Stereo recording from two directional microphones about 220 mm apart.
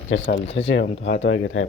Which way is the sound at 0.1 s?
55° left (ahead or behind).